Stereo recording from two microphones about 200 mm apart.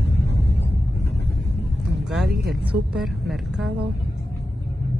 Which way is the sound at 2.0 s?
Centre (ahead or behind).